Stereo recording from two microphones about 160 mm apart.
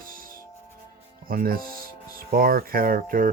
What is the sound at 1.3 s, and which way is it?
Speech, 65° right (ahead or behind).